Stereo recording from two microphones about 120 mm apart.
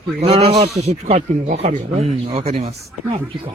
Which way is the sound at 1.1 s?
70° right (ahead or behind).